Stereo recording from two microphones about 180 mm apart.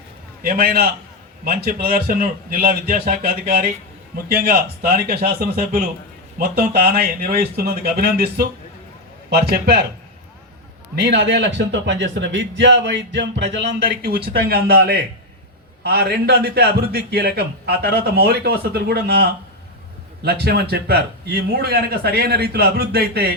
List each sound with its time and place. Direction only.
0.4 s a man's voice: 55° right (ahead or behind)
10.9 s a man's voice: 70° right (ahead or behind)